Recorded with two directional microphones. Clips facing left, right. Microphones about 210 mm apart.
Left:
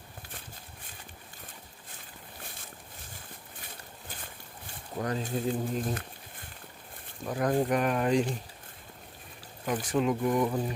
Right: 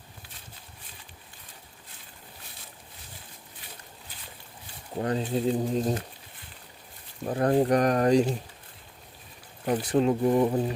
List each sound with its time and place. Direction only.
4.9 s speech: 30° right (ahead or behind)
7.3 s speech: 35° right (ahead or behind)
9.6 s speech: 35° right (ahead or behind)